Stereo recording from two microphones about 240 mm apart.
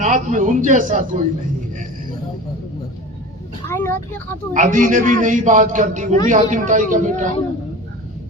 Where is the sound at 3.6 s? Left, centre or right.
Centre.